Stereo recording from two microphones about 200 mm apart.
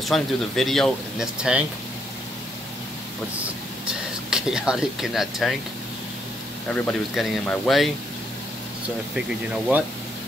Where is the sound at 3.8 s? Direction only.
5° right (ahead or behind).